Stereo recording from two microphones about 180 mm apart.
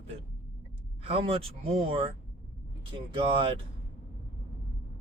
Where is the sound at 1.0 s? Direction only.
30° right (ahead or behind).